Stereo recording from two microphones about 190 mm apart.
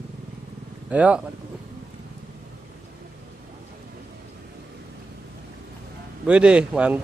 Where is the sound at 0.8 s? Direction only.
5° right (ahead or behind).